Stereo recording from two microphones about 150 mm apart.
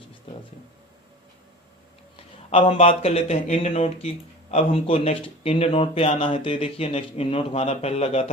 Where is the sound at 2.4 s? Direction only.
40° left (ahead or behind).